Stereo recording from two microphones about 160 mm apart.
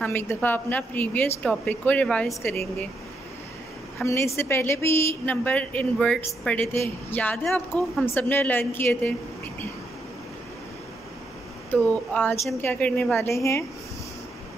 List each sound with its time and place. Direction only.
0.0 s a woman's voice: 15° left (ahead or behind)
4.0 s a woman's voice: 15° left (ahead or behind)
11.7 s a woman's voice: 10° left (ahead or behind)